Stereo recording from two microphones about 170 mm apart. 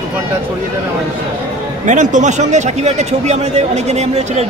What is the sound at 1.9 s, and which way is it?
A man's voice, 45° right (ahead or behind).